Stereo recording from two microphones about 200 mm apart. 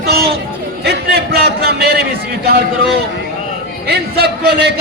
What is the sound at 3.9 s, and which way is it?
Speech, 55° right (ahead or behind).